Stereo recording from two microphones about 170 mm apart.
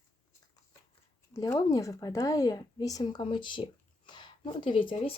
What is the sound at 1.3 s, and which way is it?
Speech, 20° left (ahead or behind).